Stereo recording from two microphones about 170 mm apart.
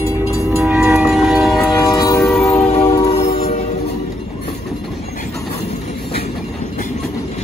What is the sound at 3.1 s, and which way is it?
Train, 35° left (ahead or behind).